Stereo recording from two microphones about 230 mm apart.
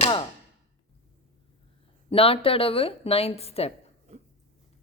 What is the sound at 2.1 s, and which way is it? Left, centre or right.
A woman's voice, left.